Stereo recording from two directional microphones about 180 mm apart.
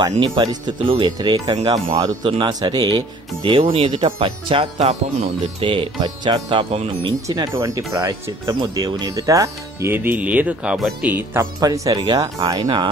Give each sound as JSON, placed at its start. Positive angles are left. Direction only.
{"t": 0.2, "sound": "speech", "side_deg": -25}